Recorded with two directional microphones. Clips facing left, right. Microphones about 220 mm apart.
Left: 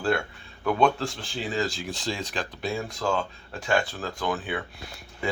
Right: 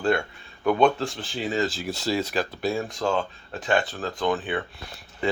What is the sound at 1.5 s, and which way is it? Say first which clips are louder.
Speech: right 2 dB; 5° right (ahead or behind).